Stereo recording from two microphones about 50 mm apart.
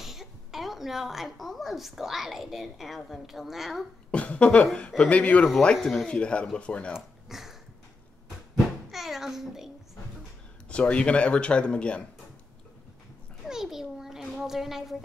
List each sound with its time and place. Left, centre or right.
0.0 s a woman's voice: centre
4.1 s speech: left
5.8 s speech: centre
6.0 s speech: left
6.9 s a sound: centre
8.9 s a sound: centre
10.7 s speech: left
13.5 s a sound: centre
14.4 s speech: centre